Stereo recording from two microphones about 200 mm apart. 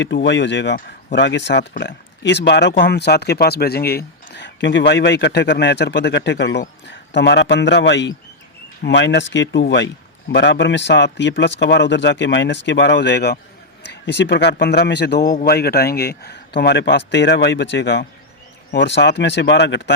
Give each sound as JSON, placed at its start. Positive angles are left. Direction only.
{"t": 0.0, "sound": "speech", "side_deg": 65}